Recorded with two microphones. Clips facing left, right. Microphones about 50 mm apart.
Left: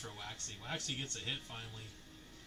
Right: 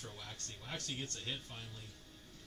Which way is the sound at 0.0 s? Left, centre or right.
Left.